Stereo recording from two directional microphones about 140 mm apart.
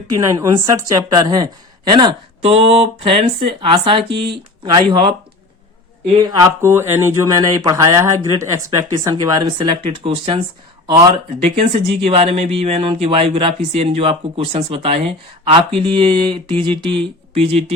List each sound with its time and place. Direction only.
0.1 s speech: 25° right (ahead or behind)
2.4 s speech: 45° right (ahead or behind)
6.3 s speech: 20° right (ahead or behind); by 17.7 s 45° right (ahead or behind)